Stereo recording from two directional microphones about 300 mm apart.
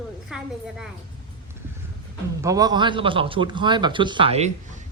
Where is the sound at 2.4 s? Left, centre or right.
Centre.